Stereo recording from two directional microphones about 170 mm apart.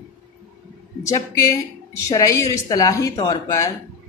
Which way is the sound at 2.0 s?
15° left (ahead or behind).